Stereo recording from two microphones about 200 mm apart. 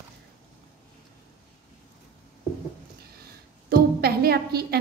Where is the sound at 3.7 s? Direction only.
50° right (ahead or behind).